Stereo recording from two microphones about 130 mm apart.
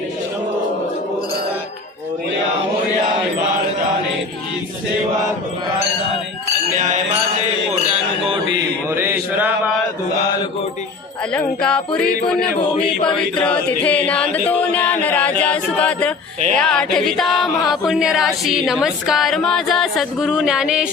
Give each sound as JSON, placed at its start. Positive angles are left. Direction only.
{"t": 6.7, "sound": "music", "side_deg": -70}
{"t": 7.7, "sound": "a sound", "side_deg": -55}
{"t": 9.0, "sound": "mantra", "side_deg": -15}
{"t": 11.3, "sound": "chant", "side_deg": 5}
{"t": 13.0, "sound": "chant", "side_deg": 5}